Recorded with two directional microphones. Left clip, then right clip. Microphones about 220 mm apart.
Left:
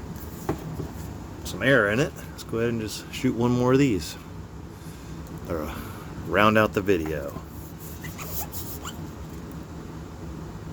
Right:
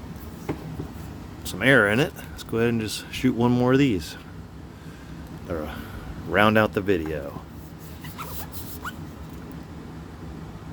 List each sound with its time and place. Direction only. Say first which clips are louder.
1.5 s speech: right 2 dB; 20° right (ahead or behind)
5.5 s speech: even; 10° right (ahead or behind)